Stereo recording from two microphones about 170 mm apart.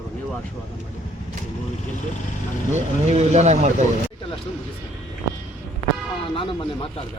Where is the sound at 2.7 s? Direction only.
40° right (ahead or behind).